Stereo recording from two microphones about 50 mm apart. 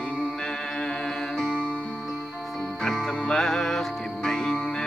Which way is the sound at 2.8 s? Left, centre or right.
Centre.